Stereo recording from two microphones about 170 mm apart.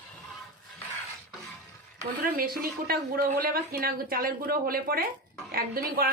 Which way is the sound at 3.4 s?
60° right (ahead or behind).